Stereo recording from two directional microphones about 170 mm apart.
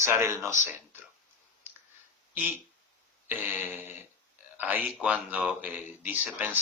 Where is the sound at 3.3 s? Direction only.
10° right (ahead or behind).